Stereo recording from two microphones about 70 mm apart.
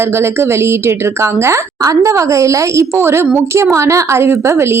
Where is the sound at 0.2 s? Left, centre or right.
Right.